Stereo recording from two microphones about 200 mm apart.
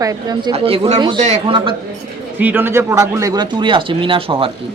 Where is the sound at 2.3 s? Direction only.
10° right (ahead or behind); by 4.5 s 25° right (ahead or behind).